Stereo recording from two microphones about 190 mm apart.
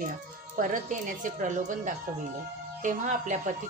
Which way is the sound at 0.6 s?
45° right (ahead or behind).